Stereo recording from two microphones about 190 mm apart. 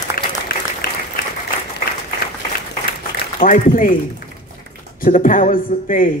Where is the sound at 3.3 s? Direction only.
45° left (ahead or behind).